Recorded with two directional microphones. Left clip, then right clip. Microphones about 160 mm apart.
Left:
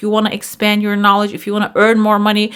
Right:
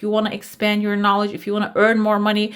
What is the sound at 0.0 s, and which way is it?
Speech, 30° left (ahead or behind).